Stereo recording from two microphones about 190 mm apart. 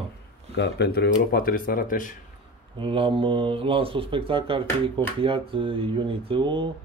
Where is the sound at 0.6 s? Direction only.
60° left (ahead or behind); by 2.1 s 45° left (ahead or behind).